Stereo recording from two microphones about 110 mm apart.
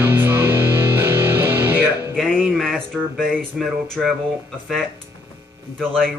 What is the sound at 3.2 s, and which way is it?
Speech, centre (ahead or behind).